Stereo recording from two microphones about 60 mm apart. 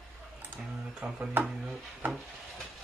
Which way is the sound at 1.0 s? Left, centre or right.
Right.